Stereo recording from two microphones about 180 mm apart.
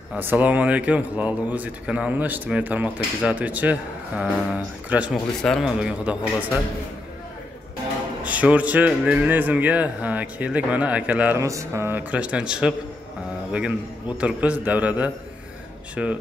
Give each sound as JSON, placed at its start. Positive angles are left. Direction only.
{"t": 0.1, "sound": "a man's voice", "side_deg": -10}
{"t": 8.2, "sound": "a man's voice", "side_deg": -10}